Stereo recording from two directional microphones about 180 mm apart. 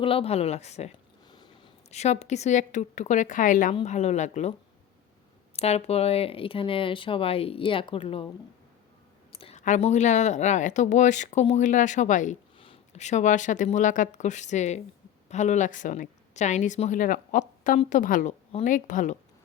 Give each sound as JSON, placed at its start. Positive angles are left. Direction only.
{"t": 0.0, "sound": "speech", "side_deg": 30}
{"t": 5.5, "sound": "speech", "side_deg": 35}
{"t": 9.4, "sound": "speech", "side_deg": 40}
{"t": 12.5, "sound": "speech", "side_deg": 30}